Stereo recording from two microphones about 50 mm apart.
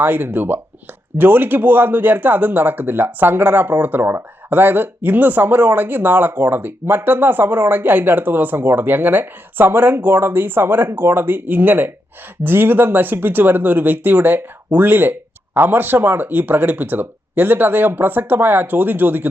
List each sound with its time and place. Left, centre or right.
0.0 s speech: right